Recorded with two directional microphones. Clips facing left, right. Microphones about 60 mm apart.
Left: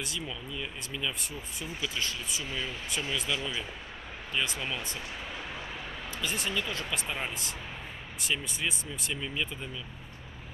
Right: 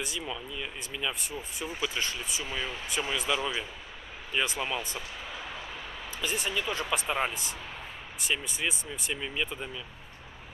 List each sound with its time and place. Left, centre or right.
0.0 s speech: centre
2.4 s speech: centre
6.2 s speech: centre